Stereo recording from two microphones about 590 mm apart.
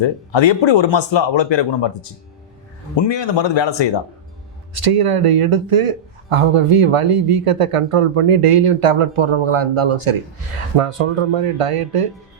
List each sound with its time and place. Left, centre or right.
0.0 s speech: left
2.9 s speech: left
4.7 s speech: right